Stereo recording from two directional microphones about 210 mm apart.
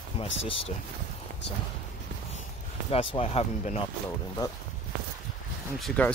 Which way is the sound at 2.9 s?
25° left (ahead or behind).